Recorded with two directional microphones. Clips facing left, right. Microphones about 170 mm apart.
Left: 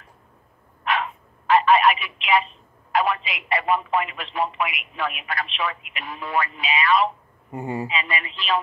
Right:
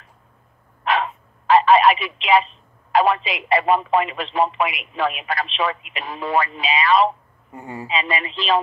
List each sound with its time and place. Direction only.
0.8 s telephone: 30° right (ahead or behind)
2.9 s speech: 30° right (ahead or behind)
7.5 s speech: 20° left (ahead or behind)
7.9 s speech: 30° right (ahead or behind)